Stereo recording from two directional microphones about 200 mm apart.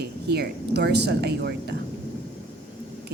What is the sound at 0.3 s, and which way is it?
A woman's voice, 55° right (ahead or behind).